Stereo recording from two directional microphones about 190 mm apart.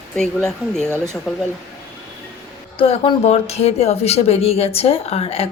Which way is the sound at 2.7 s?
30° left (ahead or behind).